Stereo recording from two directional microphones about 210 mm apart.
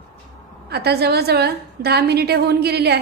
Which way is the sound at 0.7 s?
50° right (ahead or behind).